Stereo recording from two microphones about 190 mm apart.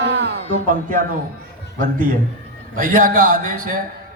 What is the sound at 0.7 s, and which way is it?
Speech, 45° right (ahead or behind).